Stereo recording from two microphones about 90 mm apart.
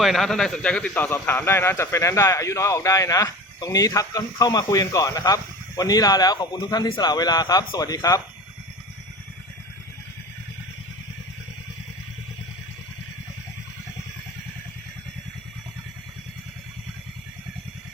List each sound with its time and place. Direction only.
0.0 s speech: centre (ahead or behind)
1.1 s a man's voice: 20° left (ahead or behind); by 8.2 s 40° left (ahead or behind)